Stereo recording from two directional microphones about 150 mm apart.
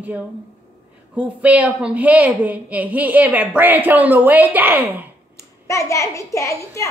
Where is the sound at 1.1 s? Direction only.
10° right (ahead or behind).